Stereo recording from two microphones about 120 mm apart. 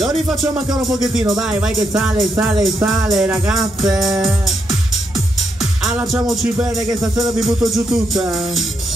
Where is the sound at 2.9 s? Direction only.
Centre (ahead or behind).